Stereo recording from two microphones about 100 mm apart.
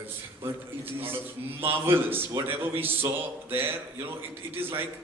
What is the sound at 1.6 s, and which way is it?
A man's voice, 25° right (ahead or behind).